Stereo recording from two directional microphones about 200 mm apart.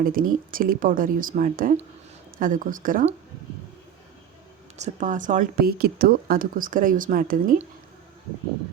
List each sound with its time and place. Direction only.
0.0 s speech: 45° right (ahead or behind)
4.8 s speech: 40° right (ahead or behind)